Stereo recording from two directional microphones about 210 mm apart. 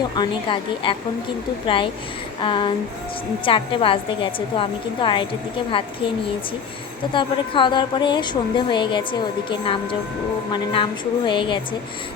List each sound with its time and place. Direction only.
0.2 s a woman's voice: 25° left (ahead or behind)
7.1 s a woman's voice: 25° left (ahead or behind)
10.5 s a woman's voice: 25° left (ahead or behind)